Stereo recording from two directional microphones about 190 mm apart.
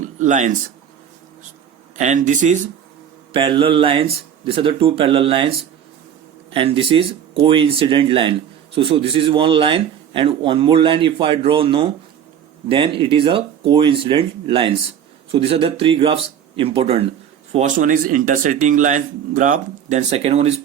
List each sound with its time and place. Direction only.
0.0 s a sound: 40° right (ahead or behind)
2.0 s speech: 40° right (ahead or behind)
3.3 s speech: 25° right (ahead or behind)